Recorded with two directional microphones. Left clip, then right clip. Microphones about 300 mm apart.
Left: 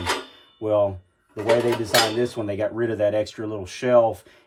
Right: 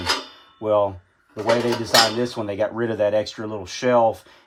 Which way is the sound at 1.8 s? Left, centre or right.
Centre.